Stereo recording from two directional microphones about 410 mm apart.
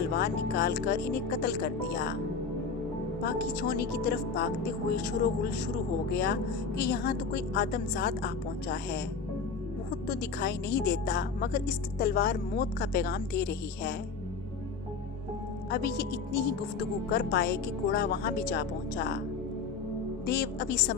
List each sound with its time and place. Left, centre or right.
0.2 s speech: left
3.2 s speech: left
6.1 s speech: left
15.7 s speech: left
20.2 s speech: left